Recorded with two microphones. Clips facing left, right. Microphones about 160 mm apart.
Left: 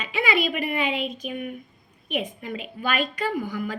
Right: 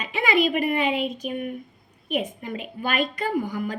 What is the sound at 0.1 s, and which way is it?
A woman's voice, 45° right (ahead or behind).